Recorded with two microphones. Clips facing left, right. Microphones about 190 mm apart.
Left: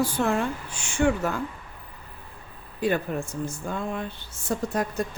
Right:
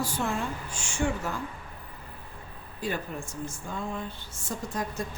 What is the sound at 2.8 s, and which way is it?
A woman's voice, 65° left (ahead or behind).